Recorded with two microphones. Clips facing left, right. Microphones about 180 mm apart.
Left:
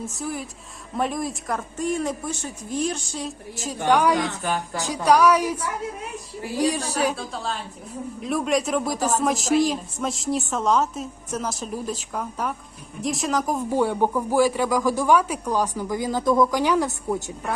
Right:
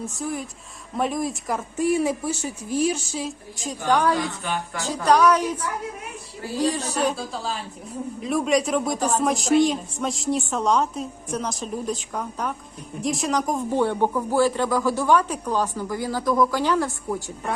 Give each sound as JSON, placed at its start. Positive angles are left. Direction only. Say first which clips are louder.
{"t": 0.1, "sound": "speech", "louder": "right 1 dB", "side_deg": 0}
{"t": 4.4, "sound": "speech", "louder": "left 2 dB", "side_deg": 40}
{"t": 4.8, "sound": "speech", "louder": "even", "side_deg": 15}
{"t": 7.2, "sound": "speech", "louder": "even", "side_deg": 0}